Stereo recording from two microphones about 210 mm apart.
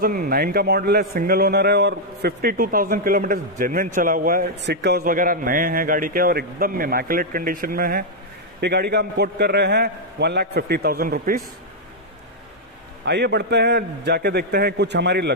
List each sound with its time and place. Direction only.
0.0 s a man's voice: 45° right (ahead or behind)
13.0 s a man's voice: 55° right (ahead or behind)